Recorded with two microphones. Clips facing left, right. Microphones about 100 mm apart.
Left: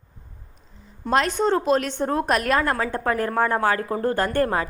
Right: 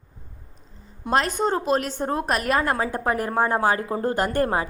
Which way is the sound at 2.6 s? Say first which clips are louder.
Even; 20° right (ahead or behind).